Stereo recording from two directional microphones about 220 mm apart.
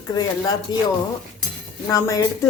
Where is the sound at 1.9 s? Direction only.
15° left (ahead or behind).